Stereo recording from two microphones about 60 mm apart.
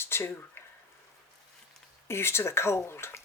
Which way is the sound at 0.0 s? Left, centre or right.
Left.